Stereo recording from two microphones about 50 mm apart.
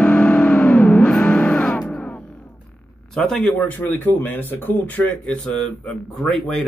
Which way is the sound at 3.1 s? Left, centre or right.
Centre.